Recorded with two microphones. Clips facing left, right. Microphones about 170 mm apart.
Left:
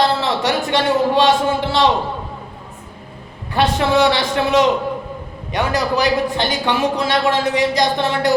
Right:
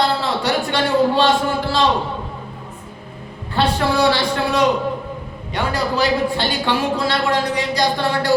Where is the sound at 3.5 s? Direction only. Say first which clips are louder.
Left 2 dB; 20° left (ahead or behind).